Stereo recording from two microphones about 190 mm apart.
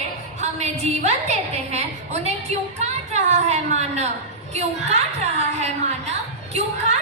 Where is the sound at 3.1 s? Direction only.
35° right (ahead or behind).